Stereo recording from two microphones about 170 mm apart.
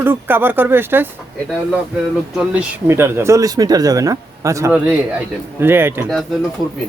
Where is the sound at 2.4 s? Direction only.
10° right (ahead or behind).